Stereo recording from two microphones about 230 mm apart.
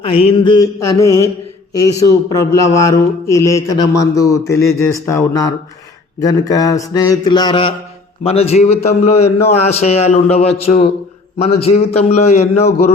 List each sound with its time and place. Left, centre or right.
0.0 s mantra: left
8.2 s a man's voice: left